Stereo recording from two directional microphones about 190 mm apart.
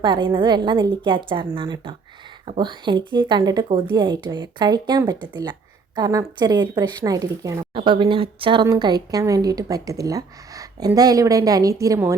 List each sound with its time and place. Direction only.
0.0 s a woman's voice: 25° right (ahead or behind)